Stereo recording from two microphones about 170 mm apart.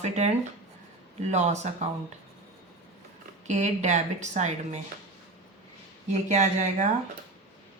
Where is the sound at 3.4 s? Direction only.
45° right (ahead or behind).